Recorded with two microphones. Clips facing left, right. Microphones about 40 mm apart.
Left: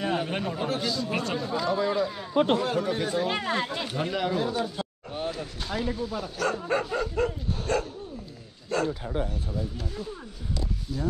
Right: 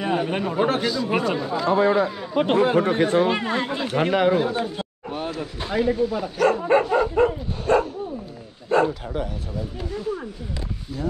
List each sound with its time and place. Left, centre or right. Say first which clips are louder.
0.0 s a sound: right 5 dB; centre
0.6 s speech: right 12 dB; right
1.1 s speech: right 6 dB; centre
1.7 s speech: right 9 dB; right
3.3 s speech: right 5 dB; centre
3.8 s speech: right 9 dB; right; by 6.5 s centre
6.5 s dog: right 9 dB; right
8.6 s bow-wow: right 8 dB; right